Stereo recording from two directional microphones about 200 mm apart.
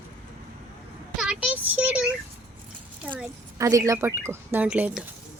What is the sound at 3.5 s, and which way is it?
A woman's voice, 15° right (ahead or behind).